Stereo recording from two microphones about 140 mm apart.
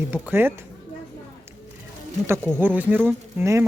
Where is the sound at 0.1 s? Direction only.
15° right (ahead or behind).